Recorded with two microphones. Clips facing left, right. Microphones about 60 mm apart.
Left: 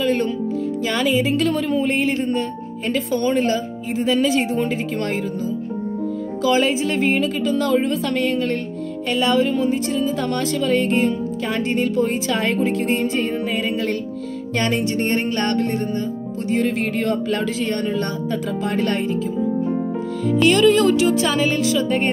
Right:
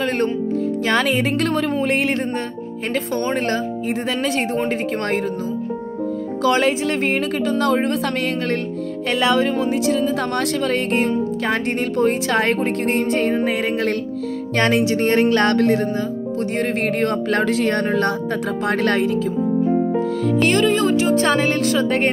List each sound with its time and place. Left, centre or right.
0.0 s a woman's voice: right
2.9 s speech: right
3.4 s a woman's voice: right
6.4 s a woman's voice: right
20.3 s speech: right
20.6 s speech: right
21.1 s speech: right